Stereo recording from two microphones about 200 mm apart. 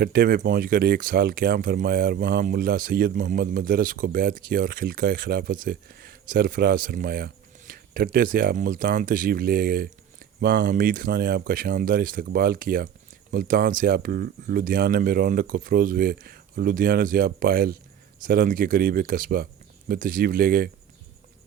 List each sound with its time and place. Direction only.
0.0 s speech: 45° right (ahead or behind)